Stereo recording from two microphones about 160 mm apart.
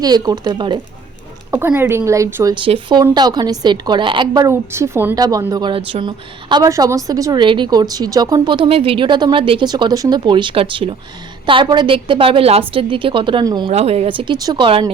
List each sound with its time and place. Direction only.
0.0 s a woman's voice: 25° right (ahead or behind)
1.5 s speech: 15° right (ahead or behind)
2.6 s a woman's voice: 30° right (ahead or behind)
4.4 s a woman's voice: 15° right (ahead or behind)
13.7 s a woman's voice: 40° right (ahead or behind)